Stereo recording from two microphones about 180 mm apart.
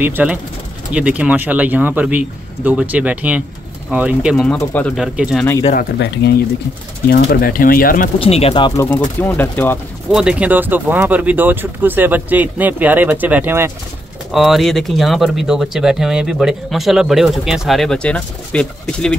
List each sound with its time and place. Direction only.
0.0 s speech: 10° right (ahead or behind)
4.6 s speech: 10° left (ahead or behind)
5.0 s speech: 5° right (ahead or behind)
5.9 s speech: 70° left (ahead or behind)
7.1 s speech: 55° left (ahead or behind)
8.2 s speech: 35° left (ahead or behind)
8.7 s speech: 15° left (ahead or behind)
10.1 s speech: 5° right (ahead or behind)